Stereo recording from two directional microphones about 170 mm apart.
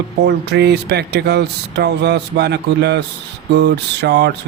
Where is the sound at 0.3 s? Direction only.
80° right.